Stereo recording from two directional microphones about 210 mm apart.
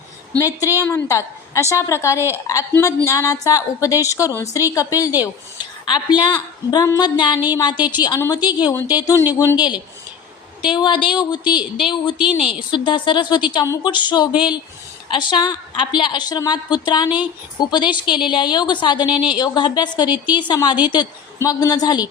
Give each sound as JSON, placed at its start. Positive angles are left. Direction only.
{"t": 0.8, "sound": "a woman's voice", "side_deg": 10}
{"t": 7.3, "sound": "a woman's voice", "side_deg": -10}
{"t": 8.0, "sound": "a woman's voice", "side_deg": 20}
{"t": 19.0, "sound": "a woman's voice", "side_deg": -5}
{"t": 19.4, "sound": "speech", "side_deg": 20}
{"t": 20.1, "sound": "a woman's voice", "side_deg": -10}
{"t": 20.5, "sound": "a woman's voice", "side_deg": 20}